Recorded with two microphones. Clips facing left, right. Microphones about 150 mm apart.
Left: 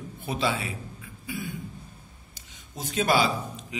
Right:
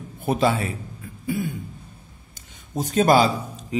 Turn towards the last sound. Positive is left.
turn(degrees=-40)  # may be behind; listen again after turning